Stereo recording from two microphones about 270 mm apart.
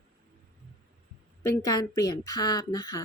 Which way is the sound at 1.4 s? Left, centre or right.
Centre.